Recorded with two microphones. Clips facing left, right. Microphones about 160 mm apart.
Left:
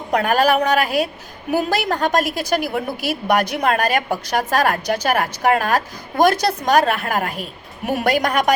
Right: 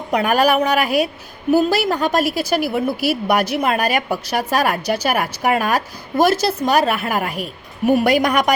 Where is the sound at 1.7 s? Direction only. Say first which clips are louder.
Right 1 dB; 10° right (ahead or behind).